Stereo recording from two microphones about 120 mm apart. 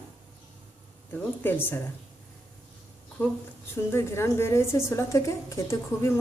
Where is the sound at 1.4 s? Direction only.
15° left (ahead or behind).